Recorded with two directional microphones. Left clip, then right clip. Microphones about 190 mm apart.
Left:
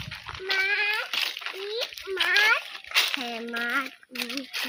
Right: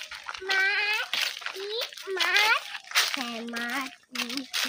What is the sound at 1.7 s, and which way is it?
Children playing, 20° right (ahead or behind).